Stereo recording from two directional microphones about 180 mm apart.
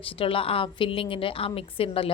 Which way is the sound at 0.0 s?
30° left (ahead or behind).